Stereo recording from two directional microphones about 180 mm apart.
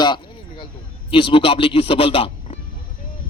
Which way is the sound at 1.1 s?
30° left (ahead or behind).